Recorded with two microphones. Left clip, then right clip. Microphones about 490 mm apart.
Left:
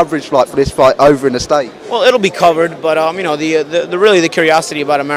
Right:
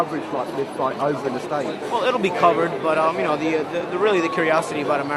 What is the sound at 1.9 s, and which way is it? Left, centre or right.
A man's voice, left.